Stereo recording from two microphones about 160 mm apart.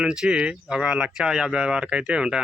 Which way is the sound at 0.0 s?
5° right (ahead or behind).